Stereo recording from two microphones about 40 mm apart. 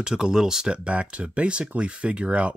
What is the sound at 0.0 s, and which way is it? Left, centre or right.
Speech, centre.